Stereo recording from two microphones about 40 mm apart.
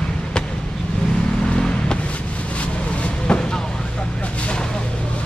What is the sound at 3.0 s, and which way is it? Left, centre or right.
Vehicle, left.